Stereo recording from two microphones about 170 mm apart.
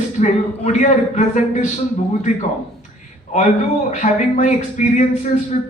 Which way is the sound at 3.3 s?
45° left (ahead or behind).